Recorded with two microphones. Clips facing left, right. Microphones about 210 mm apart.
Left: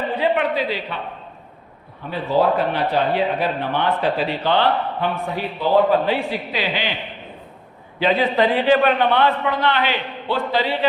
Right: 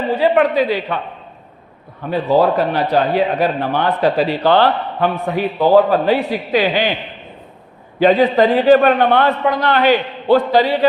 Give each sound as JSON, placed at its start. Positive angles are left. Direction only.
{"t": 0.3, "sound": "a man's voice", "side_deg": -50}
{"t": 2.0, "sound": "a man's voice", "side_deg": -50}
{"t": 2.4, "sound": "a man's voice", "side_deg": -40}
{"t": 7.9, "sound": "a man's voice", "side_deg": -45}